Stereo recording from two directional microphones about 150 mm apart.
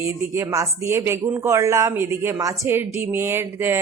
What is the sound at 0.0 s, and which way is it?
A woman's voice, 20° right (ahead or behind).